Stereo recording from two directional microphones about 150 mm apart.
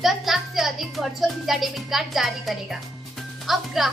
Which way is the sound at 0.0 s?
Centre (ahead or behind).